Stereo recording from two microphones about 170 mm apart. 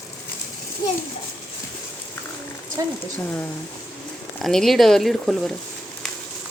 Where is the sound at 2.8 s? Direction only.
20° right (ahead or behind).